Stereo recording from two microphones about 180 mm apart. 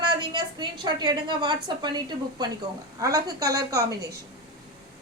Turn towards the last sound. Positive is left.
turn(degrees=-20)  # may be behind; listen again after turning